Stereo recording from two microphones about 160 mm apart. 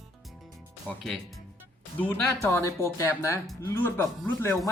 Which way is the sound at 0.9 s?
10° left (ahead or behind).